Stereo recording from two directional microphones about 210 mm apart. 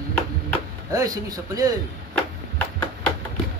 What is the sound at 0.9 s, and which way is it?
Mantra, 15° right (ahead or behind).